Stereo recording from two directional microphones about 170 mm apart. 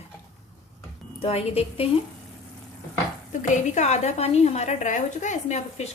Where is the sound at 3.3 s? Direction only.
50° left (ahead or behind).